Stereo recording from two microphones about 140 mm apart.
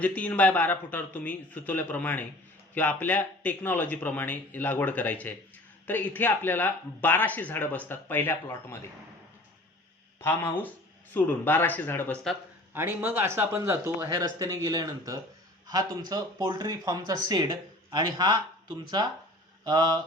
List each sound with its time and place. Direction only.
0.0 s speech: 10° left (ahead or behind)
10.2 s speech: 15° left (ahead or behind)
12.7 s speech: 15° right (ahead or behind); by 19.9 s 30° right (ahead or behind)